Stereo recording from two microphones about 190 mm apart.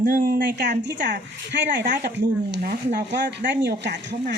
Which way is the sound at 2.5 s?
60° right (ahead or behind).